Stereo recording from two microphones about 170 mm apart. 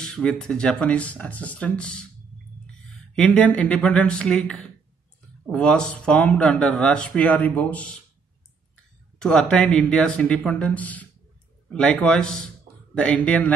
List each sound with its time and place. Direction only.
0.0 s speech: 5° left (ahead or behind)
9.2 s speech: 5° left (ahead or behind)